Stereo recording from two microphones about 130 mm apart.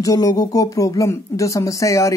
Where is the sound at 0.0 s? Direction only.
25° left (ahead or behind).